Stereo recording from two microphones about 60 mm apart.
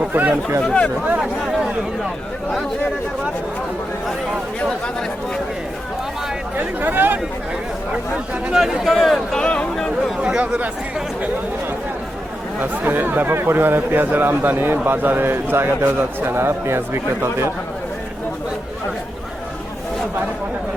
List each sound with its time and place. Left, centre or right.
0.0 s speech: right
0.6 s speech: centre
1.2 s a sound: centre
6.6 s a man's voice: right
8.5 s a man's voice: centre
10.2 s speech: centre
12.5 s a man's voice: right